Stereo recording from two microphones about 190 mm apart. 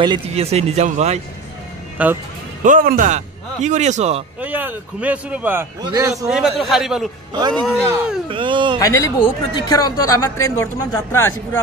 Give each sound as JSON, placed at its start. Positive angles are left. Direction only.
{"t": 0.0, "sound": "speech", "side_deg": -30}
{"t": 2.0, "sound": "a man's voice", "side_deg": -10}
{"t": 2.6, "sound": "speech", "side_deg": -45}
{"t": 4.4, "sound": "a man's voice", "side_deg": -10}
{"t": 6.2, "sound": "a man's voice", "side_deg": -5}
{"t": 8.3, "sound": "speech", "side_deg": -25}
{"t": 8.7, "sound": "a man's voice", "side_deg": 15}